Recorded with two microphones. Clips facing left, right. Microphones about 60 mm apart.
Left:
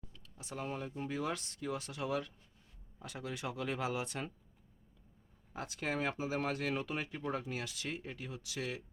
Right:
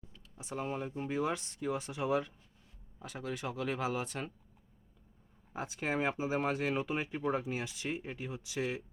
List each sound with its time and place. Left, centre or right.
0.3 s speech: centre
3.0 s speech: centre
5.5 s speech: right